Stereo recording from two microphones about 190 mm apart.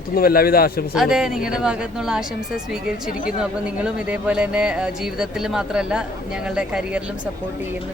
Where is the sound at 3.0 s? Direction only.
45° left (ahead or behind).